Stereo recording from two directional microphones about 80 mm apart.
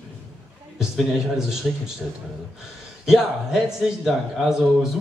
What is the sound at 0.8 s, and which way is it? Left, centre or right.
Speech, centre.